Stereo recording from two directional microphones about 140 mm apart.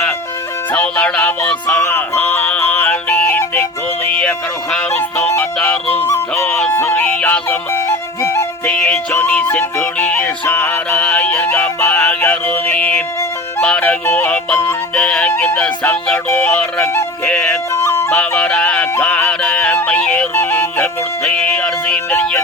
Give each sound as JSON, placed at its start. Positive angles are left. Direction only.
{"t": 0.7, "sound": "music", "side_deg": 10}
{"t": 4.9, "sound": "honk", "side_deg": 15}
{"t": 6.7, "sound": "music", "side_deg": 15}
{"t": 8.2, "sound": "music", "side_deg": 20}
{"t": 8.7, "sound": "music", "side_deg": 5}
{"t": 17.2, "sound": "music", "side_deg": 5}
{"t": 18.1, "sound": "a sound", "side_deg": 5}